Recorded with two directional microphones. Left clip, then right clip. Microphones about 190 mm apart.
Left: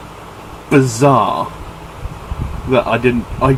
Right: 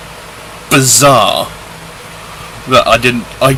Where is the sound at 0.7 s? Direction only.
15° right (ahead or behind).